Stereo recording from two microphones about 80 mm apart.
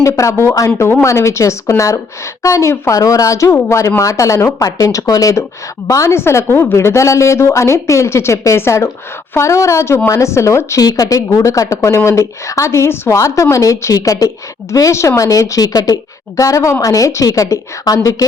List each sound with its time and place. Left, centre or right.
0.0 s a woman's voice: left